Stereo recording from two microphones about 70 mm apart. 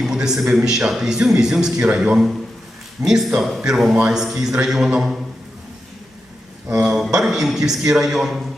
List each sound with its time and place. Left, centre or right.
0.0 s a man's voice: centre
6.7 s a man's voice: centre